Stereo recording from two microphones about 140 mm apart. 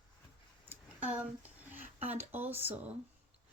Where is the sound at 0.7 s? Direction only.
10° right (ahead or behind).